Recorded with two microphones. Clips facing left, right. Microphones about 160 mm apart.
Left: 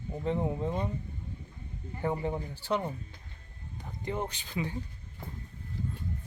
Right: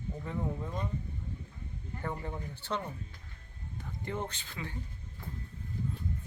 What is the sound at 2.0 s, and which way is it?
Speech, 15° left (ahead or behind).